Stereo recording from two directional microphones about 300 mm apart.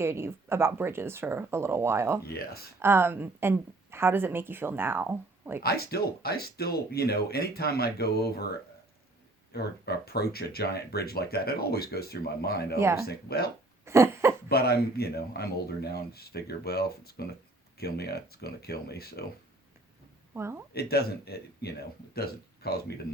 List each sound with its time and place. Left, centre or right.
0.0 s speech: centre
2.2 s speech: left
2.8 s speech: centre
5.6 s speech: left
12.8 s speech: centre
13.1 s speech: left
13.8 s a sound: centre
14.5 s speech: left
20.3 s speech: centre
20.9 s speech: left